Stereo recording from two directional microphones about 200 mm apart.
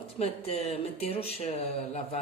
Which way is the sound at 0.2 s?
30° left (ahead or behind).